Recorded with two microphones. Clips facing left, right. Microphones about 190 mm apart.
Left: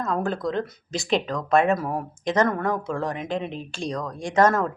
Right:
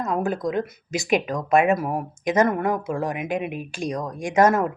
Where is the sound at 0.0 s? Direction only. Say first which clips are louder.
Right 1 dB; 15° right (ahead or behind).